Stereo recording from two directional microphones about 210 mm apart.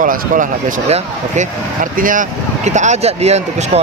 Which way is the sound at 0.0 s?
40° right (ahead or behind).